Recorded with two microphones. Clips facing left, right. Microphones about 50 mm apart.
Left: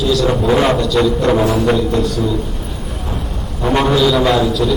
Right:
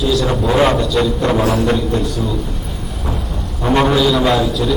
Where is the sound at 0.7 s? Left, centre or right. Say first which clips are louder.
Left 1 dB; centre.